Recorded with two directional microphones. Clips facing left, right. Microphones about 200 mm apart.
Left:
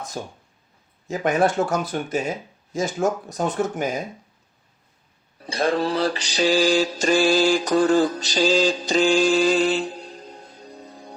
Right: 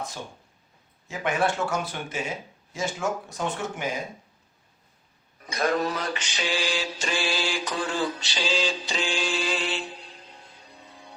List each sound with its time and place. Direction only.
0.2 s speech: 40° left (ahead or behind)
5.4 s music: 30° left (ahead or behind)